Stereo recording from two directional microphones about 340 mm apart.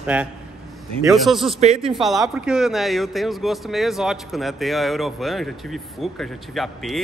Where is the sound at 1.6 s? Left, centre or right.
Centre.